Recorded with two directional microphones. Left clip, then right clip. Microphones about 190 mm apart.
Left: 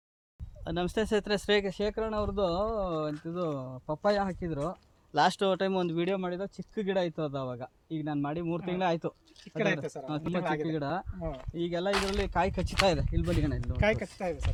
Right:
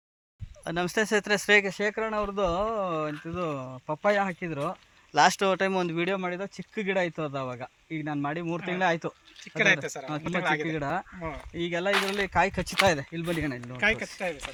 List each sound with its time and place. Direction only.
0.6 s speech: 10° right (ahead or behind)
9.8 s speech: 25° left (ahead or behind)
10.7 s speech: 15° right (ahead or behind)
13.8 s speech: 75° left (ahead or behind)